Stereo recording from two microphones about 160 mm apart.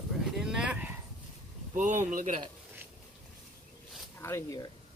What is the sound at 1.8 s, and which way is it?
Speech, 50° right (ahead or behind).